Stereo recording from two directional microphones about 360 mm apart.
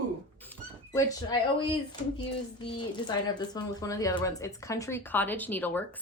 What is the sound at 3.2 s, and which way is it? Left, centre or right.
A woman's voice, centre.